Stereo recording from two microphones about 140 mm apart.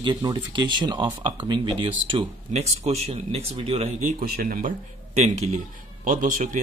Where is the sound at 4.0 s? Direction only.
80° right.